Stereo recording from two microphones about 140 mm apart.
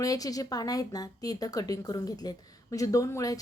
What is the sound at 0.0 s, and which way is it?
A woman's voice, 25° left (ahead or behind).